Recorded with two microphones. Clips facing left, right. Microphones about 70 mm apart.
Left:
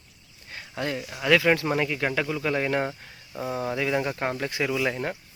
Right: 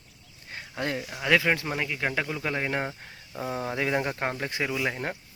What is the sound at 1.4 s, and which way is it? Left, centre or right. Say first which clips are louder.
Speech: left 4 dB; centre.